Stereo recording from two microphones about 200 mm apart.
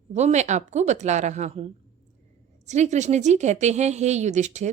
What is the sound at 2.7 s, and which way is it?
A woman's voice, 35° right (ahead or behind).